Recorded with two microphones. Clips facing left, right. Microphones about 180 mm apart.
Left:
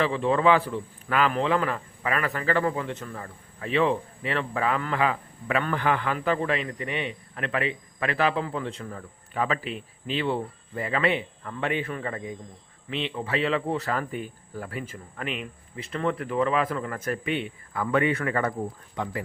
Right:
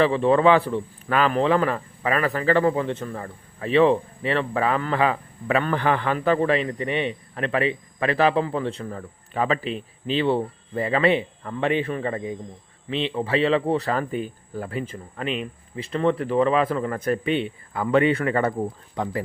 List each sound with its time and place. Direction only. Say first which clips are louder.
0.0 s a man's voice: right 5 dB; 35° right (ahead or behind)